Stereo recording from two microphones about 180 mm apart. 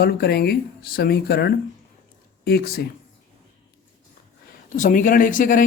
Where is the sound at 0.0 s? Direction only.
60° left (ahead or behind).